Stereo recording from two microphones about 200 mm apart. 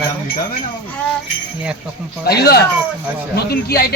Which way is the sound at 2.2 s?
50° left (ahead or behind).